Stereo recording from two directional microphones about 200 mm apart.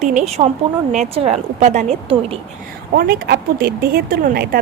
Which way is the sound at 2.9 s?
50° right (ahead or behind).